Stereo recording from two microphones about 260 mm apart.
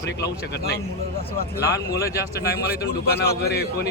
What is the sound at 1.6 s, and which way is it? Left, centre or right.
Speech, centre.